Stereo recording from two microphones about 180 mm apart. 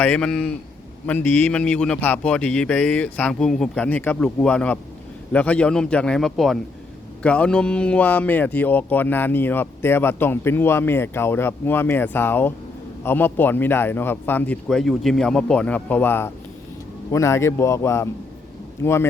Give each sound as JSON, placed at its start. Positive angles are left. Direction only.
{"t": 0.0, "sound": "a man's voice", "side_deg": 5}